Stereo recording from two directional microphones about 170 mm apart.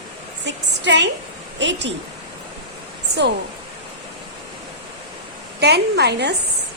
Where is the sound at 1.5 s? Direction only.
90° right.